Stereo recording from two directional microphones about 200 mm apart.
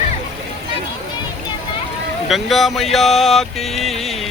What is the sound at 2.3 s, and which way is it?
Music, centre (ahead or behind).